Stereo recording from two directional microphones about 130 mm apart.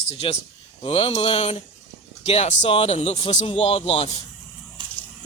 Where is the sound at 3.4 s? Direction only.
45° left (ahead or behind).